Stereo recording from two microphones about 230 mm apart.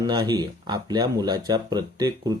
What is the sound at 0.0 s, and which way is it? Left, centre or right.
Speech, centre.